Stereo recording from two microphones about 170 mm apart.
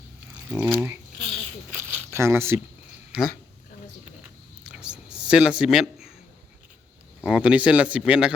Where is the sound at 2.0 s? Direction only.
15° right (ahead or behind).